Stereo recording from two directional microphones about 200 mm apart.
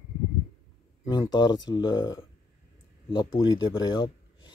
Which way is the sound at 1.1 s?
20° left (ahead or behind).